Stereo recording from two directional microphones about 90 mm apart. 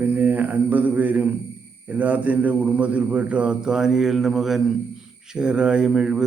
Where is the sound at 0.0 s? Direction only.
15° right (ahead or behind).